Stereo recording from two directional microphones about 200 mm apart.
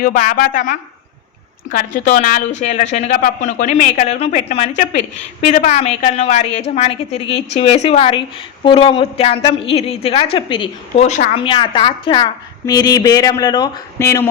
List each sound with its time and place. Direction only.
0.0 s a woman's voice: 45° left (ahead or behind)
11.5 s a woman's voice: 25° left (ahead or behind)